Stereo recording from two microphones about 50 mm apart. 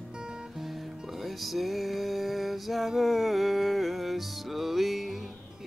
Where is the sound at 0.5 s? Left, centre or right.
Centre.